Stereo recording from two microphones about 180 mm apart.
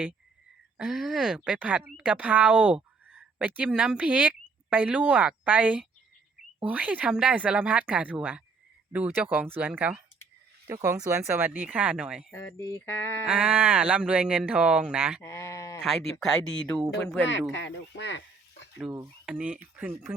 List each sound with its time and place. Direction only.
0.8 s speech: centre (ahead or behind)
12.3 s a sound: 15° left (ahead or behind)
13.2 s speech: 10° right (ahead or behind)
15.2 s sheep: 15° left (ahead or behind)
15.8 s speech: centre (ahead or behind)
17.5 s speech: 85° left
19.2 s speech: 5° right (ahead or behind)